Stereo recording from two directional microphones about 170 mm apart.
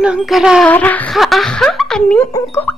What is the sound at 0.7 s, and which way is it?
Speech, 10° left (ahead or behind).